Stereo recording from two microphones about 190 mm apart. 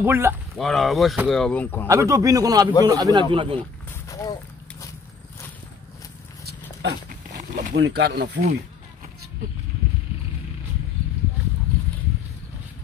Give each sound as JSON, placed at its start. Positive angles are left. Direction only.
{"t": 0.0, "sound": "a man's voice", "side_deg": -10}
{"t": 0.6, "sound": "speech", "side_deg": 0}
{"t": 1.9, "sound": "a man's voice", "side_deg": -15}
{"t": 3.9, "sound": "a sound", "side_deg": 20}
{"t": 7.1, "sound": "a sound", "side_deg": -40}
{"t": 7.7, "sound": "speech", "side_deg": -65}